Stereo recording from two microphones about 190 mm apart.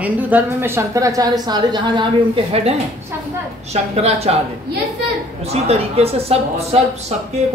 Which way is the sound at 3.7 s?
35° right (ahead or behind).